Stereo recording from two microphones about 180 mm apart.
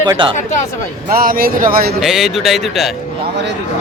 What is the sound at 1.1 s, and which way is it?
Speech, 55° right (ahead or behind).